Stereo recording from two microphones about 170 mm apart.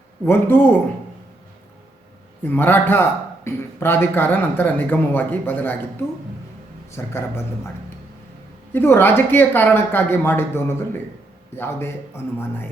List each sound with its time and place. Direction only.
0.3 s a man's voice: 10° left (ahead or behind)
2.4 s a man's voice: 10° left (ahead or behind)
8.7 s a man's voice: 10° left (ahead or behind)